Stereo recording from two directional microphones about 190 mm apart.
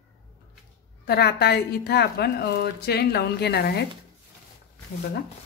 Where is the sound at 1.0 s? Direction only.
60° left (ahead or behind).